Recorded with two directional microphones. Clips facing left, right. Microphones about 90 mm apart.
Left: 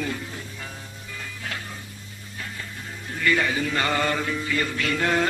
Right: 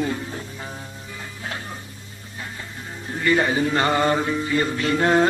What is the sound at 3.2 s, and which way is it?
Mantra, 30° right (ahead or behind).